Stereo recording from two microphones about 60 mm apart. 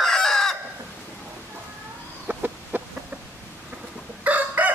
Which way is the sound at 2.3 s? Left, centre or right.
Right.